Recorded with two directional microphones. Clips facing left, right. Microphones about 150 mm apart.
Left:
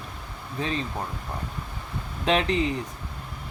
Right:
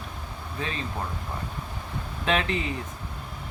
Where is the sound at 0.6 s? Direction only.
35° left (ahead or behind).